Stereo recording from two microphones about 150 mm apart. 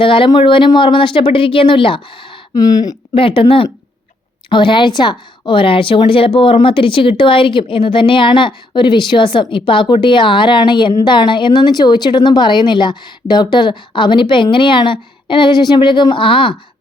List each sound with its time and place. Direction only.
0.0 s speech: 35° left (ahead or behind)
3.2 s speech: 35° left (ahead or behind)